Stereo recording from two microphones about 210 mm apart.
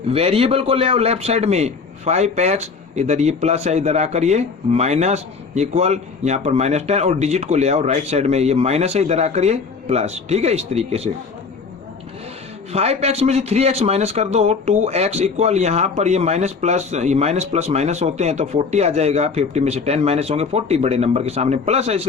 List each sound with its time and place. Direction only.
0.1 s a man's voice: 30° right (ahead or behind)
12.7 s a man's voice: 30° right (ahead or behind)